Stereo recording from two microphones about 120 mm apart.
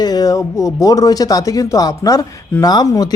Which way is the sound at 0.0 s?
30° left (ahead or behind).